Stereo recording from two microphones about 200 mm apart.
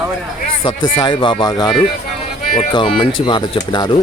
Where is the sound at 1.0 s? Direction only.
25° left (ahead or behind).